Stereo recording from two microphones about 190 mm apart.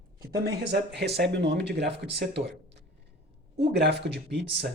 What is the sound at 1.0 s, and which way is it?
Speech, 60° right (ahead or behind).